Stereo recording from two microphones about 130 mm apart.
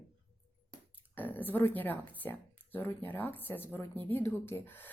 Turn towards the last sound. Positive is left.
turn(degrees=15)  # may be behind; listen again after turning